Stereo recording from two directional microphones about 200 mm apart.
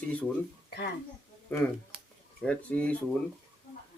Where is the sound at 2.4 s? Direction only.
5° left (ahead or behind).